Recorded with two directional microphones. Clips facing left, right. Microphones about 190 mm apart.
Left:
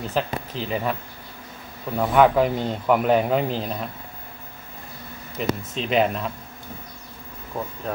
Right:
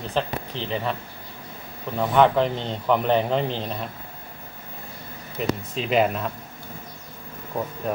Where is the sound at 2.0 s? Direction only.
5° left (ahead or behind).